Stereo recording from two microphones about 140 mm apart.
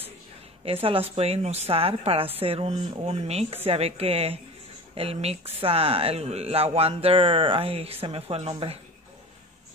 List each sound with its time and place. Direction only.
0.7 s speech: 40° right (ahead or behind)